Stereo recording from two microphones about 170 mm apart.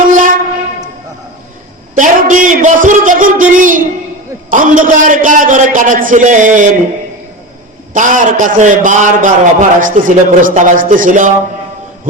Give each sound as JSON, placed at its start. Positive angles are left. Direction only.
{"t": 0.1, "sound": "train", "side_deg": -50}
{"t": 2.0, "sound": "a man's voice", "side_deg": -50}
{"t": 7.9, "sound": "a man's voice", "side_deg": -50}